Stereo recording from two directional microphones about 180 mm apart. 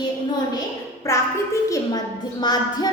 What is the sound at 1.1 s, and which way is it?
A woman's voice, 15° left (ahead or behind).